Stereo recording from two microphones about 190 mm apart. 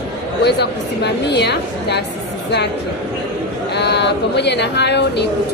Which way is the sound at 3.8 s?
65° left (ahead or behind).